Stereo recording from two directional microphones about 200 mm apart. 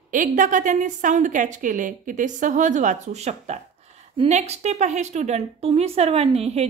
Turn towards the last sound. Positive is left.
turn(degrees=-30)  # may be behind; listen again after turning